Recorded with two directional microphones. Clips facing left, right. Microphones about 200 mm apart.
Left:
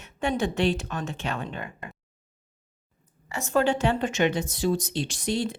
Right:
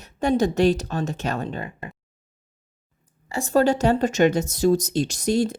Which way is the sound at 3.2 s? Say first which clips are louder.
Right 4 dB; 35° right (ahead or behind).